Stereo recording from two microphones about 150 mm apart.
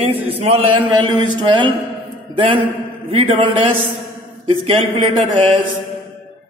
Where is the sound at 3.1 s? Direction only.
35° right (ahead or behind).